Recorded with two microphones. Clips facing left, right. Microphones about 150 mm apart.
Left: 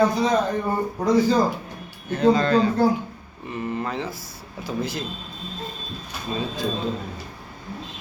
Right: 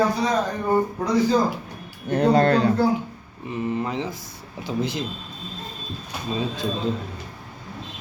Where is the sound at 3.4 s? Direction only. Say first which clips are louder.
Right 2 dB; 15° right (ahead or behind).